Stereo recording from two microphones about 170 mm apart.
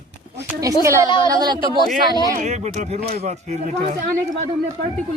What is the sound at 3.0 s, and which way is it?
Speech, 65° right (ahead or behind).